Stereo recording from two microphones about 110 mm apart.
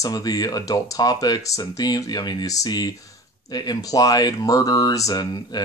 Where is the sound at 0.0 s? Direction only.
35° left (ahead or behind).